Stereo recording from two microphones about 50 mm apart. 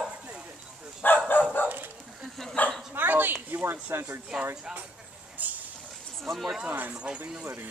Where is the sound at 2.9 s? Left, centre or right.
Right.